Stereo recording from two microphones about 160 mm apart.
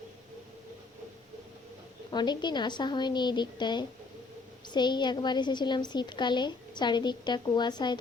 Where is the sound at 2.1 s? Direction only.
25° left (ahead or behind).